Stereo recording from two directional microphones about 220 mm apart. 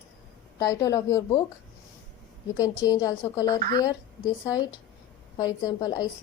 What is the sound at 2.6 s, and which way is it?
A woman's voice, 15° left (ahead or behind).